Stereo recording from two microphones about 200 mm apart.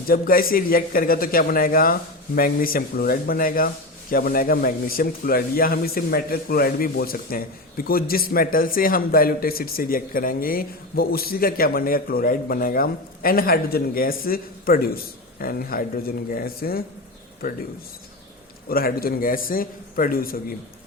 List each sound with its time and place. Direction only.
0.1 s a man's voice: 45° left (ahead or behind)
18.7 s a man's voice: 50° left (ahead or behind)